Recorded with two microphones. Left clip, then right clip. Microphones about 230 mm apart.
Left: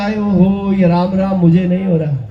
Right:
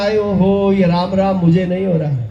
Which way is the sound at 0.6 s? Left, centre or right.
Right.